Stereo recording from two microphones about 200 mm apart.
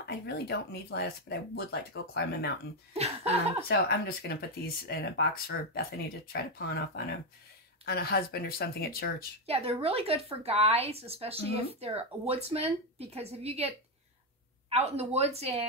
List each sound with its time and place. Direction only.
0.0 s speech: 55° left (ahead or behind)
2.9 s speech: 30° right (ahead or behind)
3.6 s speech: 55° left (ahead or behind)
7.8 s speech: 50° left (ahead or behind)
9.5 s a woman's voice: 30° right (ahead or behind)